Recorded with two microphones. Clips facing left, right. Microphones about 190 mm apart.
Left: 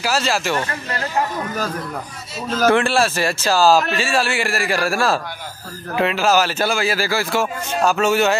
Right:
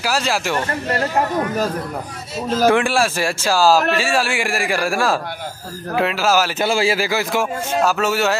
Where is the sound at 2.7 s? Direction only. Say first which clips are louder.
Left 2 dB; 10° right (ahead or behind).